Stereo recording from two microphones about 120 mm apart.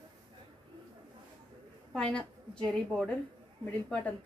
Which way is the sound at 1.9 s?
5° left (ahead or behind).